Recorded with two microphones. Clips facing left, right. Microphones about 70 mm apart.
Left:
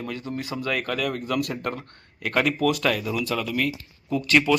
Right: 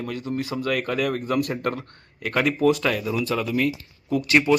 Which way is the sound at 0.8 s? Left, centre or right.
Right.